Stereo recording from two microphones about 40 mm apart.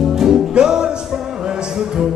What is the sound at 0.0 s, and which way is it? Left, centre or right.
Music, centre.